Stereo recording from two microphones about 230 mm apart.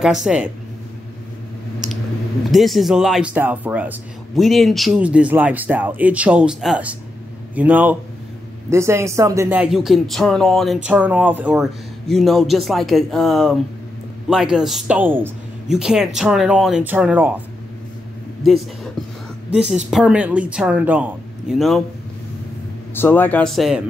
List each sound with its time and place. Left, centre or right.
0.0 s speech: centre
2.5 s a man's voice: centre
19.5 s speech: centre
22.9 s speech: centre